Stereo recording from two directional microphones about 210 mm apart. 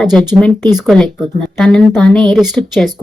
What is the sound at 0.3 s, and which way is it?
Speech, 5° left (ahead or behind).